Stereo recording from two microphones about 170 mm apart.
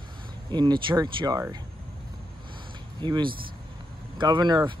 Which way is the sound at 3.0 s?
25° right (ahead or behind).